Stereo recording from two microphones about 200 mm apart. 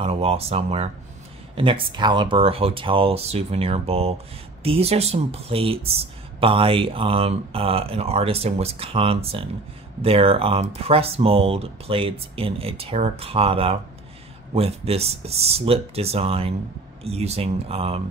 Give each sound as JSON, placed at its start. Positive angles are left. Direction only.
{"t": 0.0, "sound": "speech", "side_deg": -30}